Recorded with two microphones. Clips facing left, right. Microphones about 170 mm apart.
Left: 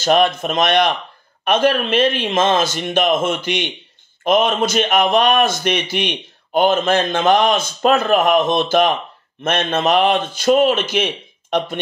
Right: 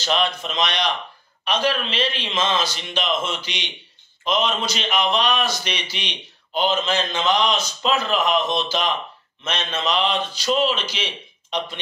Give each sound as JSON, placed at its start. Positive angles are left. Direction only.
{"t": 0.0, "sound": "a man's voice", "side_deg": 50}